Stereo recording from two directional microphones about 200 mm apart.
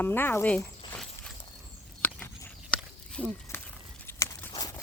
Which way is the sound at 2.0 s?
5° left (ahead or behind).